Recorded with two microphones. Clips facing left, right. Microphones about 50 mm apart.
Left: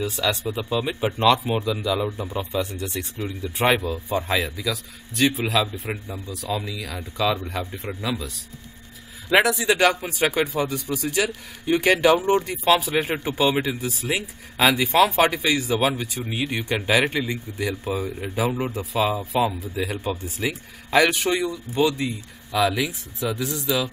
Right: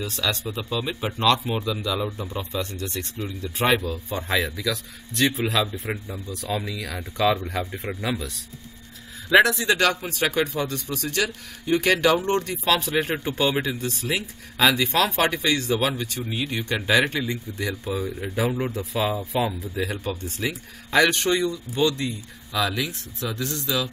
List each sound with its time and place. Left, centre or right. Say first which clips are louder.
0.0 s speech: left 3 dB; centre
6.5 s speech: even; centre
6.8 s speech: right 1 dB; centre
9.3 s speech: right 1 dB; centre